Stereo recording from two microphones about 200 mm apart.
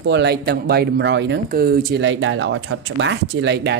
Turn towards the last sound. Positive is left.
turn(degrees=-60)  # may be behind; listen again after turning